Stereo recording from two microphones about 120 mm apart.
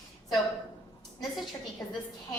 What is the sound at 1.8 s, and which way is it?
Speech, 20° left (ahead or behind).